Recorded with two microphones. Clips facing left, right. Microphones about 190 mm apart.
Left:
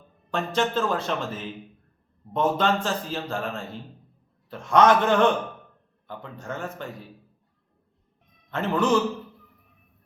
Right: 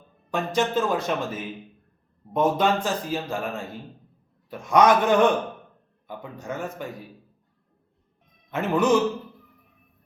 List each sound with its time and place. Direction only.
0.3 s a man's voice: 15° right (ahead or behind)
8.4 s a man's voice: 15° right (ahead or behind)